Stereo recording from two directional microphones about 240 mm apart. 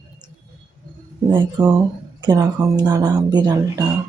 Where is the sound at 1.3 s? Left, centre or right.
Centre.